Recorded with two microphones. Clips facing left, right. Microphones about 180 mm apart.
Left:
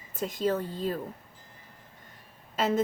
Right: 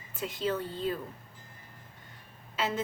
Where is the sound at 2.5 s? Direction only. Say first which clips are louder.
Left 5 dB; 45° left (ahead or behind).